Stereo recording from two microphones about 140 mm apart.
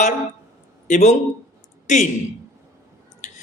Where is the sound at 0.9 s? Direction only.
60° left (ahead or behind).